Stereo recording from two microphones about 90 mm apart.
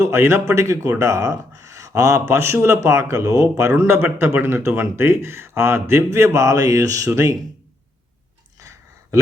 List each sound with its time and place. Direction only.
0.0 s speech: 30° right (ahead or behind)
3.8 s a man's voice: 25° right (ahead or behind)